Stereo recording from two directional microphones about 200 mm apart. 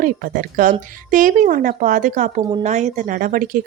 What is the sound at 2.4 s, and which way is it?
Speech, 20° right (ahead or behind).